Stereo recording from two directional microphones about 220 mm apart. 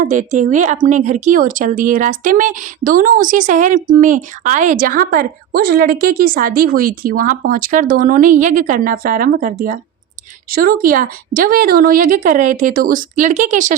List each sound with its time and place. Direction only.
0.0 s speech: 35° right (ahead or behind)